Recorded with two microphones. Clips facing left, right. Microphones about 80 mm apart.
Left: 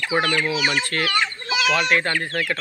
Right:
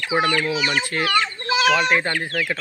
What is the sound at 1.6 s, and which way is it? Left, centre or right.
Speech, right.